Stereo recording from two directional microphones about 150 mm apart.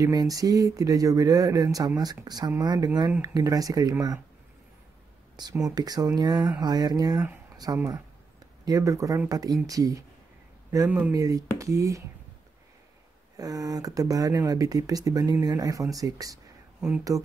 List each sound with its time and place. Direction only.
0.0 s speech: 25° right (ahead or behind)
5.3 s speech: 25° right (ahead or behind)
10.9 s speech: 10° right (ahead or behind)
11.1 s speech: 25° right (ahead or behind)
13.4 s speech: 25° right (ahead or behind)